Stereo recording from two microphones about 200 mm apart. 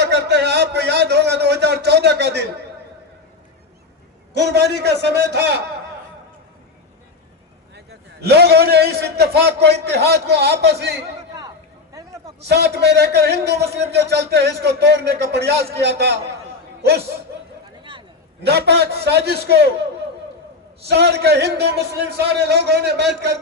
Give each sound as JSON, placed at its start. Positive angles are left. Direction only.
{"t": 0.0, "sound": "a sound", "side_deg": -60}
{"t": 4.4, "sound": "a man's voice", "side_deg": -55}
{"t": 7.9, "sound": "a man's voice", "side_deg": -55}
{"t": 12.5, "sound": "a man's voice", "side_deg": -55}
{"t": 18.4, "sound": "a man's voice", "side_deg": -55}
{"t": 20.8, "sound": "a man's voice", "side_deg": -55}